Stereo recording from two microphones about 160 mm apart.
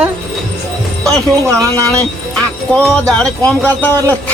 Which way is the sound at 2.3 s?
5° left (ahead or behind).